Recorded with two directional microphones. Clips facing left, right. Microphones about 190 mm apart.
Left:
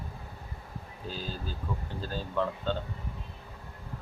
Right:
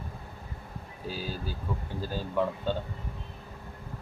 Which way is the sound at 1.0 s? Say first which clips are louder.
Right 2 dB; 10° right (ahead or behind).